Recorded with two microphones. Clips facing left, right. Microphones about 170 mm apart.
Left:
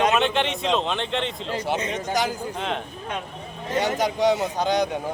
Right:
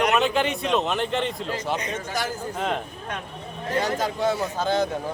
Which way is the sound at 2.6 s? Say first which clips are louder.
Right 3 dB; 5° right (ahead or behind).